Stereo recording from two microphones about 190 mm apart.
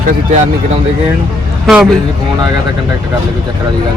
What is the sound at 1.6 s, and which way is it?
Speech, centre (ahead or behind).